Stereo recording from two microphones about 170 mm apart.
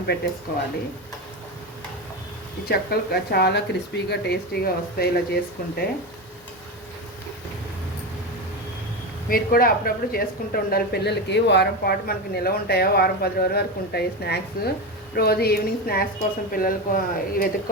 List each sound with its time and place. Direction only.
2.6 s a woman's voice: 70° left (ahead or behind)
9.3 s a woman's voice: 60° left (ahead or behind)